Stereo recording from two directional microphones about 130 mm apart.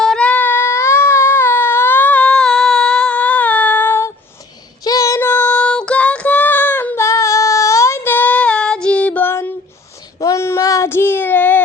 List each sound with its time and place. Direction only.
0.0 s baby cry: 5° left (ahead or behind)
4.8 s child singing: 25° left (ahead or behind)